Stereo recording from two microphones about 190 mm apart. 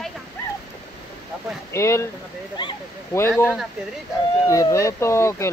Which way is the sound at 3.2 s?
10° left (ahead or behind).